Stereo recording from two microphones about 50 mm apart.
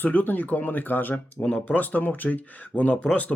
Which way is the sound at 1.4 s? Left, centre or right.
Left.